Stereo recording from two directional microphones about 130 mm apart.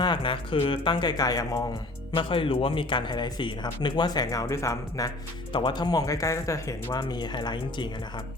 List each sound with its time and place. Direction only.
0.0 s speech: 40° left (ahead or behind)
2.1 s speech: 40° left (ahead or behind); by 5.1 s 25° left (ahead or behind)
5.5 s speech: 40° left (ahead or behind)